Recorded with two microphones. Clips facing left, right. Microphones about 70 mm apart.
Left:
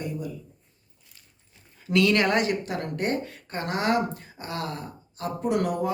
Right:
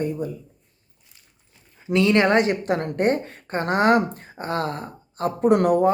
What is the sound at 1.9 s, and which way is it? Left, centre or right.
A woman's voice, right.